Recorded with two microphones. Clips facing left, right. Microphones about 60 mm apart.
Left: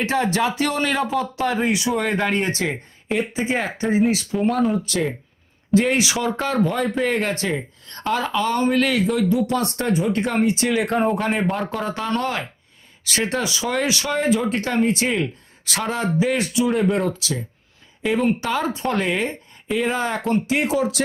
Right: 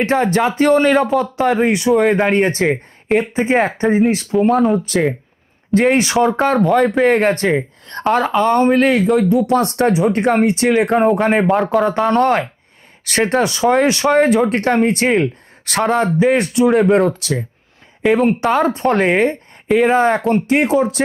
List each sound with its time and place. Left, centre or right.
0.0 s speech: right
4.3 s speech: centre
4.7 s speech: right
19.9 s speech: right